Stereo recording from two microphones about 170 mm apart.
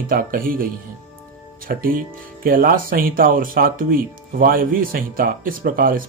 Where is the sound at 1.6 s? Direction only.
55° right (ahead or behind).